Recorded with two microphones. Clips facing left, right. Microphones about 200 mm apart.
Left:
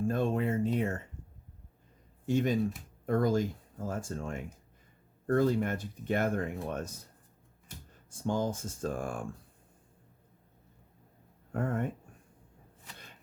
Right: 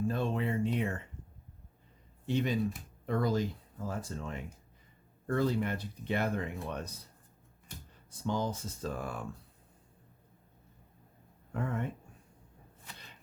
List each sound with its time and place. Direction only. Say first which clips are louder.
0.0 s a sound: left 3 dB; 50° left (ahead or behind)
2.2 s speech: left 3 dB; 45° left (ahead or behind)
8.1 s speech: left 2 dB; 50° left (ahead or behind)
11.5 s speech: left 3 dB; 50° left (ahead or behind)